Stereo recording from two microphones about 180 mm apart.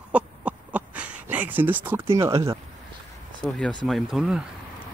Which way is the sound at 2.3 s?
25° right (ahead or behind).